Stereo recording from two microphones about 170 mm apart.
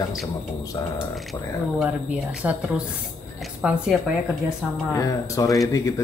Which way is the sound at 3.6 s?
5° right (ahead or behind).